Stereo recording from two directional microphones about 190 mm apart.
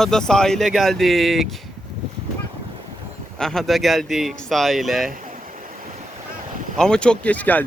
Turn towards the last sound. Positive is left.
turn(degrees=10)  # may be behind; listen again after turning